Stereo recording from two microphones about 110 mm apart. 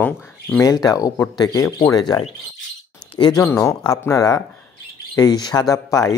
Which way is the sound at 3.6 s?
30° left (ahead or behind).